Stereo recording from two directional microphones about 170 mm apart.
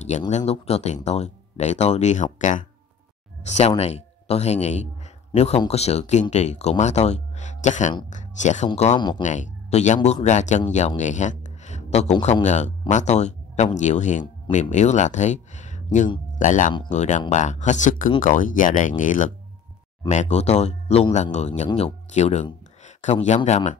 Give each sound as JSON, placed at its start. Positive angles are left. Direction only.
{"t": 0.3, "sound": "speech", "side_deg": 40}